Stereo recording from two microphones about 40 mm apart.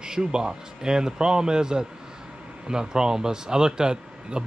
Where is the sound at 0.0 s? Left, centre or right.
Centre.